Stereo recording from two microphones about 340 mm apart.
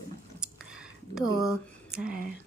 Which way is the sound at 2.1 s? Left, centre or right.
Right.